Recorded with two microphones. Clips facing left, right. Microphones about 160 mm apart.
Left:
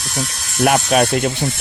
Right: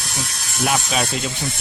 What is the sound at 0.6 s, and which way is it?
Speech, 55° left (ahead or behind).